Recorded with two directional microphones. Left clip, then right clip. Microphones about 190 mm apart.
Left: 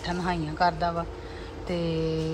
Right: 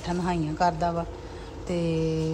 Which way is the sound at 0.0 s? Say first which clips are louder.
Right 1 dB; 10° right (ahead or behind).